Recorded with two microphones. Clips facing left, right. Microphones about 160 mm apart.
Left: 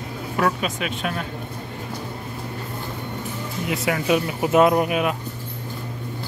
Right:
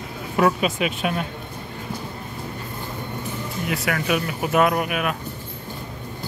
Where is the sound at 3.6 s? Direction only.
25° left (ahead or behind).